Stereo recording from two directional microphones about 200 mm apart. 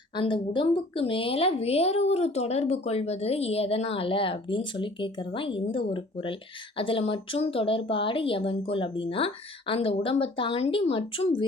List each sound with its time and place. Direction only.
0.2 s a woman's voice: 25° left (ahead or behind)